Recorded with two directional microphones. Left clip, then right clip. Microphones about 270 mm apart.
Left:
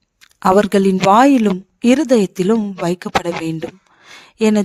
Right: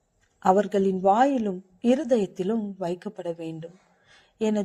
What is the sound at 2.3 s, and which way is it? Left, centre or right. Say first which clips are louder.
Speech: left 11 dB; left.